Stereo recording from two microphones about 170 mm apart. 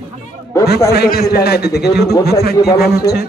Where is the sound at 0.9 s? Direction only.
65° left (ahead or behind).